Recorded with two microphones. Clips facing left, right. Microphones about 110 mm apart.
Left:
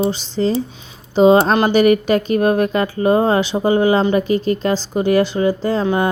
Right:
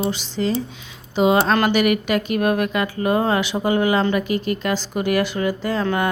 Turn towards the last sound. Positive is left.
turn(degrees=25)  # may be behind; listen again after turning